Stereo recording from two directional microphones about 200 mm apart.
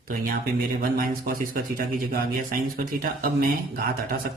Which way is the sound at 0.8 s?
45° right (ahead or behind).